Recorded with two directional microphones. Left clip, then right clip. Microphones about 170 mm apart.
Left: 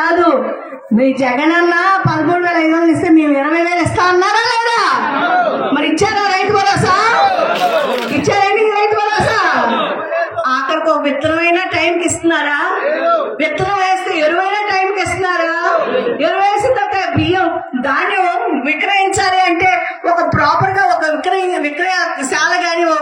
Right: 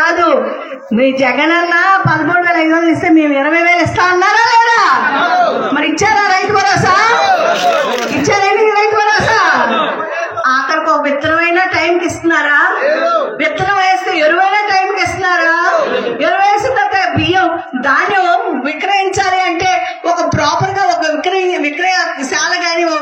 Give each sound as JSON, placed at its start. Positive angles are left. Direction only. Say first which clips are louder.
{"t": 0.0, "sound": "a sound", "louder": "right 1 dB", "side_deg": 15}
{"t": 0.9, "sound": "a man's voice", "louder": "right 2 dB", "side_deg": 15}
{"t": 6.0, "sound": "music", "louder": "right 5 dB", "side_deg": 10}
{"t": 8.3, "sound": "music", "louder": "right 2 dB", "side_deg": 0}
{"t": 13.7, "sound": "a sound", "louder": "right 2 dB", "side_deg": 0}
{"t": 17.3, "sound": "speech", "louder": "right 2 dB", "side_deg": 0}
{"t": 20.1, "sound": "music", "louder": "left 1 dB", "side_deg": -45}